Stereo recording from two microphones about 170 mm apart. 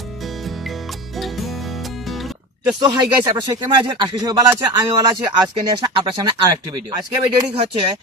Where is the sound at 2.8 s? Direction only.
25° right (ahead or behind).